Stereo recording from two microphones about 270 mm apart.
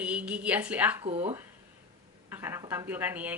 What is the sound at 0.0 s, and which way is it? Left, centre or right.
Speech, centre.